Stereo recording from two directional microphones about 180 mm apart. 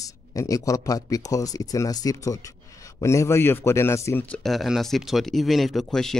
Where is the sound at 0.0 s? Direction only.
20° left (ahead or behind).